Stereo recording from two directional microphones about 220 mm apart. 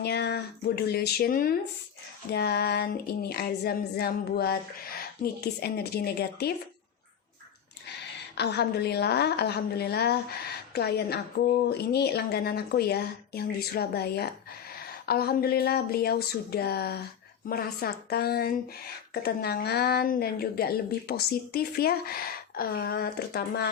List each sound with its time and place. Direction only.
0.0 s a woman's voice: 50° left (ahead or behind)
8.4 s a woman's voice: 50° left (ahead or behind)